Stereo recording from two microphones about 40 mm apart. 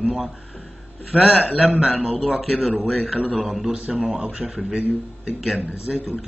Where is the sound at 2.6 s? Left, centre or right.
Centre.